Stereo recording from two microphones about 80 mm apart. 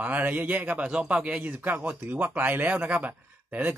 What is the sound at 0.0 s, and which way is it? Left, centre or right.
A man's voice, right.